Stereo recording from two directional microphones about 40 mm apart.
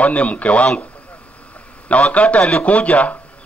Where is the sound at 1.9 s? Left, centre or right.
Left.